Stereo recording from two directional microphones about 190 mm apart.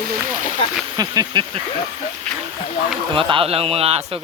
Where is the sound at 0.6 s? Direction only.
25° left (ahead or behind).